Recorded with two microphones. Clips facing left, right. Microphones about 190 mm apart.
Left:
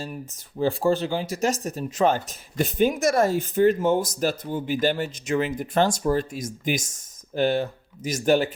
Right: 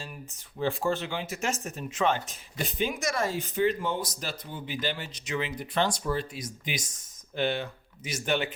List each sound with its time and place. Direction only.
0.0 s speech: 40° left (ahead or behind)